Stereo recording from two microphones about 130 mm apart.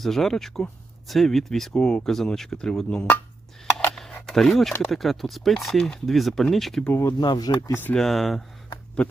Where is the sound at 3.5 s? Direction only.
5° left (ahead or behind).